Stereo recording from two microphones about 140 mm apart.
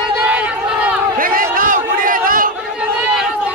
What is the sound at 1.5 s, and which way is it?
Crowd, 80° right.